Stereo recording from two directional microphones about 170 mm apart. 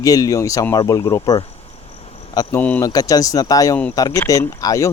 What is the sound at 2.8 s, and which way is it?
Speech, 20° left (ahead or behind).